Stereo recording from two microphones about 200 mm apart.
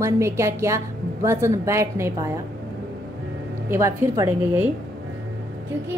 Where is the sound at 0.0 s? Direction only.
15° right (ahead or behind).